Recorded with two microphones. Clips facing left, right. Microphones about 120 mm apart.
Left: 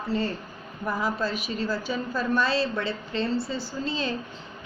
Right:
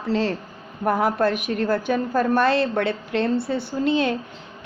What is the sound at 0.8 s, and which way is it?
A woman's voice, 60° right (ahead or behind).